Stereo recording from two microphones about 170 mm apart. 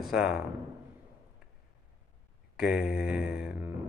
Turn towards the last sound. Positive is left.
turn(degrees=-5)  # may be behind; listen again after turning